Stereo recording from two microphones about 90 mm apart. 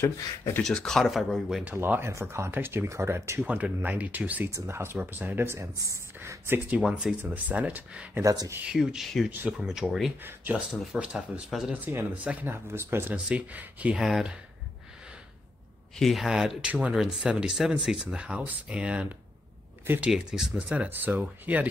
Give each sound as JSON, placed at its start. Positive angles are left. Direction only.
{"t": 0.6, "sound": "speech", "side_deg": 5}
{"t": 1.8, "sound": "speech", "side_deg": -25}
{"t": 3.4, "sound": "speech", "side_deg": -15}
{"t": 4.6, "sound": "speech", "side_deg": -30}
{"t": 6.8, "sound": "speech", "side_deg": -10}
{"t": 8.2, "sound": "speech", "side_deg": -35}
{"t": 8.6, "sound": "speech", "side_deg": -5}
{"t": 9.3, "sound": "speech", "side_deg": -20}
{"t": 9.8, "sound": "speech", "side_deg": 0}
{"t": 10.2, "sound": "speech", "side_deg": -20}
{"t": 11.8, "sound": "speech", "side_deg": -20}
{"t": 13.1, "sound": "speech", "side_deg": -15}
{"t": 13.9, "sound": "speech", "side_deg": -5}
{"t": 16.0, "sound": "speech", "side_deg": 0}